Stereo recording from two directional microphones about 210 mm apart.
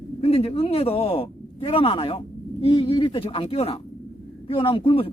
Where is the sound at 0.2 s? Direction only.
30° left (ahead or behind).